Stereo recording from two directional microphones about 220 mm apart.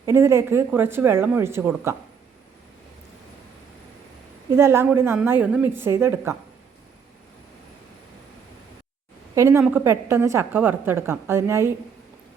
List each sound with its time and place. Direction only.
0.0 s a woman's voice: 10° right (ahead or behind)
4.5 s a woman's voice: 10° right (ahead or behind)
9.3 s a woman's voice: 15° right (ahead or behind)